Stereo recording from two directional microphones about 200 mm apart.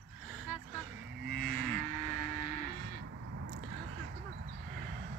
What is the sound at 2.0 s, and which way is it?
Vehicle, 40° left (ahead or behind).